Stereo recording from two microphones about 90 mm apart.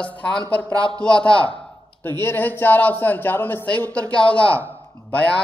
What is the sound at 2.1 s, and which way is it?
A man's voice, 25° left (ahead or behind).